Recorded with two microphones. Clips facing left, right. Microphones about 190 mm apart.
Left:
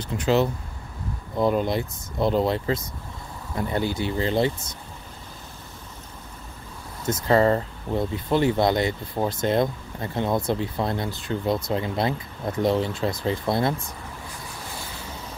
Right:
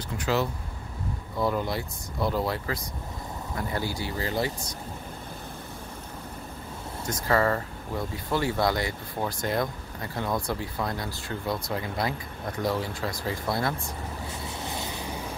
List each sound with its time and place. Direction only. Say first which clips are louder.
0.2 s speech: left 6 dB; 25° left (ahead or behind)
7.1 s speech: left 5 dB; 25° left (ahead or behind)
14.7 s vehicle: right 4 dB; 20° right (ahead or behind)